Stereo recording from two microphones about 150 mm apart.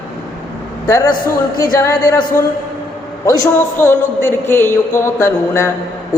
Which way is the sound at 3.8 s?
15° left (ahead or behind).